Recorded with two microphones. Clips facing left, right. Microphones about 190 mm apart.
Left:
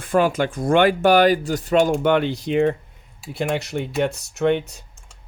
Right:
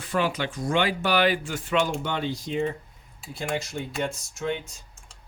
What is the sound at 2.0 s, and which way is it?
Speech, 65° left (ahead or behind).